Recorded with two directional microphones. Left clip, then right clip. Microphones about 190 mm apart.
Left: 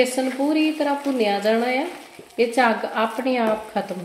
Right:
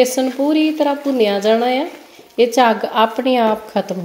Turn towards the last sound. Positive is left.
turn(degrees=-40)  # may be behind; listen again after turning